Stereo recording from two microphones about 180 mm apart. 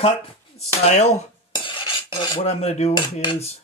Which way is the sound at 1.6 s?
30° left (ahead or behind).